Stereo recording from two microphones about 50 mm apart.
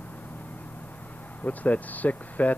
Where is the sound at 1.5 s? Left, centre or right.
Left.